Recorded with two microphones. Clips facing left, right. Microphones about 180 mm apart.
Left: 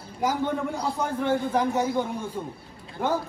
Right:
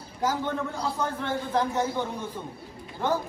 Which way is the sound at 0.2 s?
10° left (ahead or behind).